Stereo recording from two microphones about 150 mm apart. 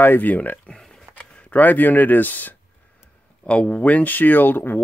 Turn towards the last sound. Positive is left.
turn(degrees=15)  # may be behind; listen again after turning